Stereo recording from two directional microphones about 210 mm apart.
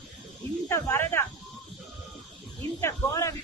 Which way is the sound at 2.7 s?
15° left (ahead or behind).